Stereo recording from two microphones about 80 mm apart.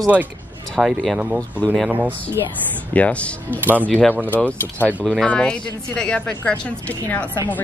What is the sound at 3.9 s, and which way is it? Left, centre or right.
Speech, centre.